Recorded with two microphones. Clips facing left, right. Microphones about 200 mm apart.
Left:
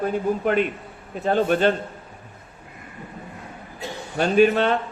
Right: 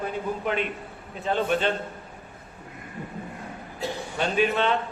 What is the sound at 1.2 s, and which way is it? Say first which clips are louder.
Speech: left 5 dB; 45° left (ahead or behind).